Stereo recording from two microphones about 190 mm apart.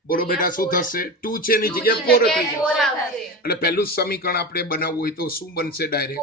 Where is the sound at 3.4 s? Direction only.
55° left (ahead or behind).